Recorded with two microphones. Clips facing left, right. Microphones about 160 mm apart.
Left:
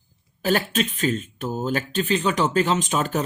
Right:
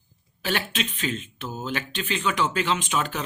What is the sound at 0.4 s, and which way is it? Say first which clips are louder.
Speech: left 6 dB; 40° left (ahead or behind).